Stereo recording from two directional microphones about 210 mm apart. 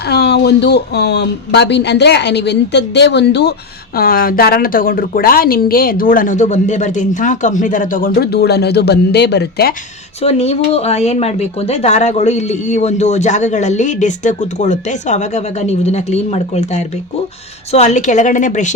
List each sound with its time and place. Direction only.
0.1 s a woman's voice: 50° left (ahead or behind)
10.2 s speech: 30° left (ahead or behind)